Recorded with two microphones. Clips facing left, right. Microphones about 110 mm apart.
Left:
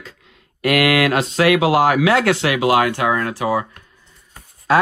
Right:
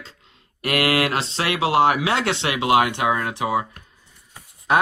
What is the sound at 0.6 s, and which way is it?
Speech, 25° right (ahead or behind).